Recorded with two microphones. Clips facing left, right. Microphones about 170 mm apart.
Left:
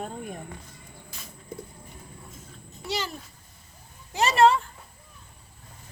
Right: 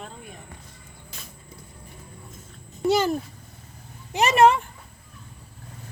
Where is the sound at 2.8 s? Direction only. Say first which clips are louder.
Right 11 dB; 50° right (ahead or behind).